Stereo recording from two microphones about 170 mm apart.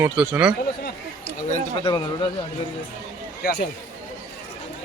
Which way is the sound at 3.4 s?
65° left (ahead or behind).